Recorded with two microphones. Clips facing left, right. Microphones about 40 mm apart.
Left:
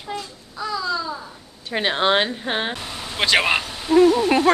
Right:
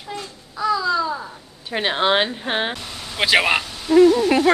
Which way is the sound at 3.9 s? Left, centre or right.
Centre.